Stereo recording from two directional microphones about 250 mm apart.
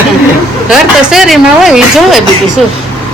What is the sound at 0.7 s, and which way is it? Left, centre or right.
A woman's voice, centre.